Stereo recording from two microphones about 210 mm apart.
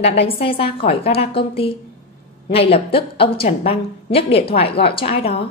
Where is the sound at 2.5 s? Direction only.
25° left (ahead or behind).